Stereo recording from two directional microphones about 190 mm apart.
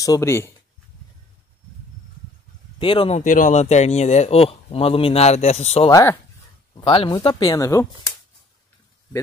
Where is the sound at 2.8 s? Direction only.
25° left (ahead or behind).